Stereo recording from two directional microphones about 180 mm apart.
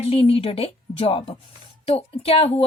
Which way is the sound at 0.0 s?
30° left (ahead or behind).